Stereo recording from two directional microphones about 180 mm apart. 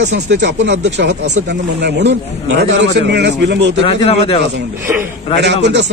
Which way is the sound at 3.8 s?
30° left (ahead or behind).